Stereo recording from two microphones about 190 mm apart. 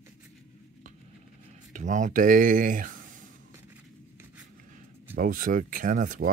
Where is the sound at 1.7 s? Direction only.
40° right (ahead or behind).